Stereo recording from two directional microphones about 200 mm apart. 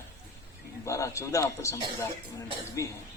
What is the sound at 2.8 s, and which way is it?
Speech, 15° left (ahead or behind).